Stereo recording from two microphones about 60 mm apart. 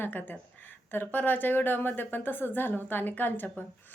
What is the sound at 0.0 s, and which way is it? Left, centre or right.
Speech, left.